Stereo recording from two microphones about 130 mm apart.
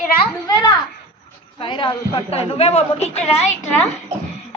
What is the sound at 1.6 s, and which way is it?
A woman's voice, 40° left (ahead or behind).